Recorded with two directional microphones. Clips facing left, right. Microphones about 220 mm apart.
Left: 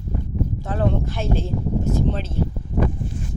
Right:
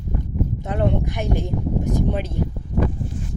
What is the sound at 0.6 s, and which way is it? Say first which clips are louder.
Speech: right 1 dB; 20° right (ahead or behind).